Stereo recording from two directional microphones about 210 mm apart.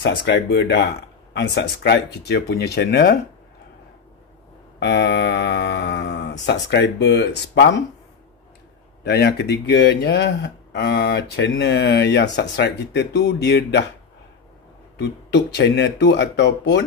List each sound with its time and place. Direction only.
0.0 s speech: 55° left (ahead or behind)
4.7 s speech: 55° left (ahead or behind)
9.0 s speech: 50° left (ahead or behind)
15.0 s speech: 55° left (ahead or behind)